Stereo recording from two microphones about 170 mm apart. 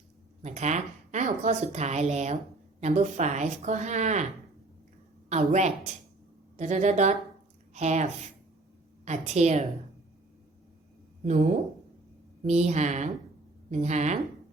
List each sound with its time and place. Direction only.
0.4 s a woman's voice: 45° right (ahead or behind)
5.3 s a woman's voice: 45° right (ahead or behind)
11.2 s a woman's voice: 45° right (ahead or behind)